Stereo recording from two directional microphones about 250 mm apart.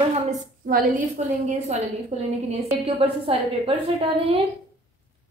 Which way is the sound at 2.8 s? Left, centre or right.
Right.